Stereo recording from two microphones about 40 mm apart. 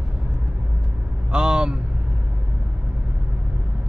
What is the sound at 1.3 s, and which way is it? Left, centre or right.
Vehicle, right.